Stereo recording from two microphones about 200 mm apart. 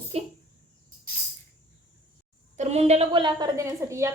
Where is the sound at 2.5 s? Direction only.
30° right (ahead or behind); by 4.1 s 15° right (ahead or behind).